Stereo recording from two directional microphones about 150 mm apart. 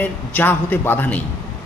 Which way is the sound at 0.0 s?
10° left (ahead or behind).